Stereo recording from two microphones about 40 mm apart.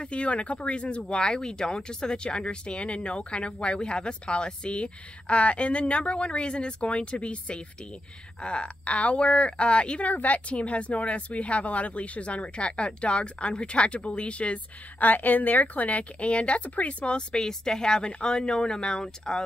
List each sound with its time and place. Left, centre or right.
0.0 s speech: left
10.0 s speech: left
15.0 s speech: left
17.0 s a woman's voice: left